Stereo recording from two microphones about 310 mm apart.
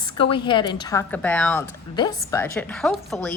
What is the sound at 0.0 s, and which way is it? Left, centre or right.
A woman's voice, centre.